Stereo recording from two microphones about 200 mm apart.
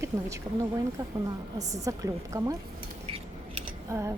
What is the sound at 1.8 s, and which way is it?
Speech, 15° right (ahead or behind).